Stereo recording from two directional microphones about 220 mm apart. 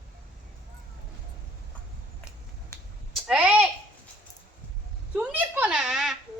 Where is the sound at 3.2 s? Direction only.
5° right (ahead or behind).